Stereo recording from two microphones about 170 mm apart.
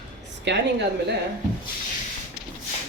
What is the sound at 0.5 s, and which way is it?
Speech, 90° right.